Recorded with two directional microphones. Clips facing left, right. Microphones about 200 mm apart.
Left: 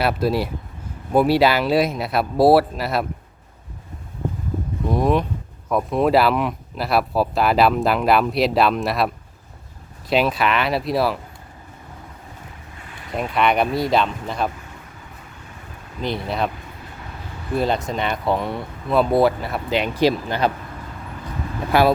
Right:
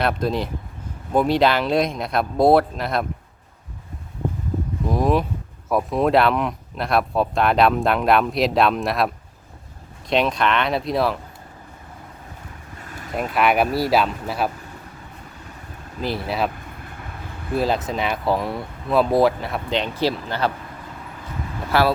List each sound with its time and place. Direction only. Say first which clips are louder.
0.0 s speech: left 2 dB; 5° left (ahead or behind)
4.9 s speech: left 1 dB; centre (ahead or behind)
13.1 s speech: even; centre (ahead or behind)
16.0 s speech: even; 5° right (ahead or behind)
17.5 s speech: even; centre (ahead or behind); by 20.5 s 15° left (ahead or behind)
21.7 s speech: left 3 dB; 15° left (ahead or behind)